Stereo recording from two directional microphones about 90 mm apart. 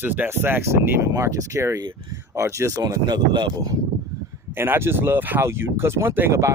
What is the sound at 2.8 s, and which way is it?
Speech, 50° right (ahead or behind).